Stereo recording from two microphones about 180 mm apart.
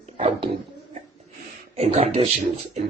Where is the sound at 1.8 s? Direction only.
35° right (ahead or behind).